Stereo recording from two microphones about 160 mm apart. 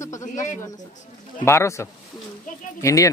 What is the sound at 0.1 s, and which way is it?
Bird, 50° left (ahead or behind).